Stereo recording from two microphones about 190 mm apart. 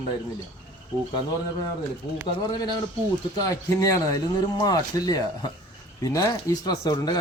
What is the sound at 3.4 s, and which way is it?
Speech, 15° left (ahead or behind).